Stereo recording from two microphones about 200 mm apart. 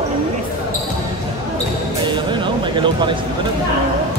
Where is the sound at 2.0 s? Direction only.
25° right (ahead or behind).